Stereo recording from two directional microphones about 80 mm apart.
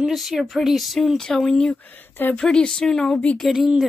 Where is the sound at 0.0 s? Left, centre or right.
Centre.